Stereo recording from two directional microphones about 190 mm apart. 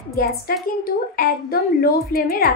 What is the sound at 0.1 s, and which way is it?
A woman's voice, 55° left (ahead or behind).